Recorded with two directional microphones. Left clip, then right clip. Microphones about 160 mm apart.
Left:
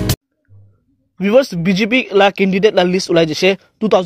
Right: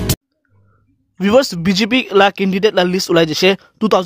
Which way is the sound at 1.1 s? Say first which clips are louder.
Even; 30° right (ahead or behind).